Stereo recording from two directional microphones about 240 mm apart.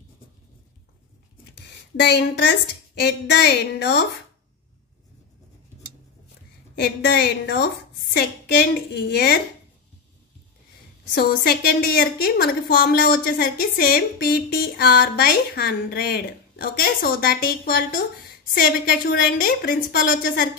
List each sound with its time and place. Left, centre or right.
2.0 s a woman's voice: left
6.7 s a woman's voice: left
11.1 s a woman's voice: left